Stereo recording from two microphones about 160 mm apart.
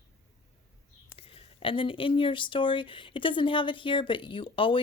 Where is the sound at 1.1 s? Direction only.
35° left (ahead or behind).